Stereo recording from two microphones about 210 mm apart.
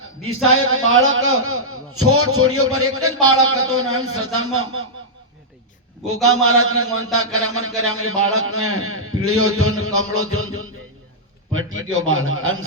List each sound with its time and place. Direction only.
0.4 s a man's voice: 75° right (ahead or behind)
6.2 s a man's voice: 90° right
11.5 s a man's voice: 75° right (ahead or behind)